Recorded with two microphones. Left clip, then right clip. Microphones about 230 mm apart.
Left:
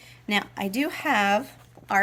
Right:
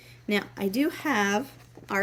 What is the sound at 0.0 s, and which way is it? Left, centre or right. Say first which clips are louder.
A woman's voice: left 2 dB; left.